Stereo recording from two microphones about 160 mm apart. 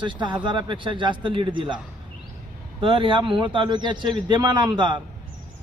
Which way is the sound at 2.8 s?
35° right (ahead or behind).